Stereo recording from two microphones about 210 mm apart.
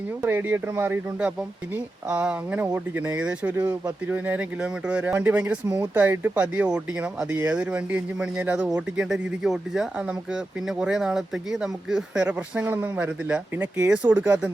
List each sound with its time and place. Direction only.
0.2 s speech: 10° right (ahead or behind)
5.6 s speech: 20° right (ahead or behind)